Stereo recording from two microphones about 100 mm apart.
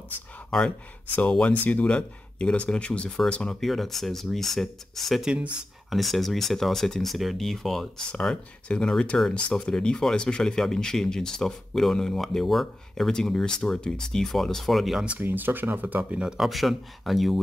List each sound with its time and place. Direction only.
0.5 s speech: 5° left (ahead or behind)
15.0 s speech: 20° right (ahead or behind); by 17.4 s centre (ahead or behind)